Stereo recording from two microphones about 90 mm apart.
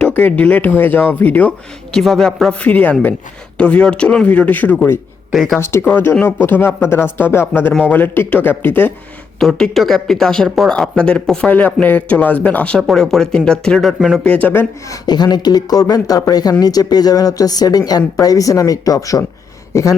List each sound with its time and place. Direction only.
0.0 s speech: 20° left (ahead or behind)
1.9 s speech: 5° left (ahead or behind)
2.6 s speech: 15° left (ahead or behind)
5.3 s speech: centre (ahead or behind)
5.5 s speech: 30° left (ahead or behind)
9.4 s speech: 5° left (ahead or behind)
14.3 s speech: 15° left (ahead or behind)
14.8 s speech: 50° left (ahead or behind)
19.7 s a sound: 40° left (ahead or behind)